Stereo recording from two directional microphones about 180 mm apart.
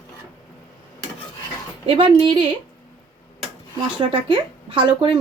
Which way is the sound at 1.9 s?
30° right (ahead or behind).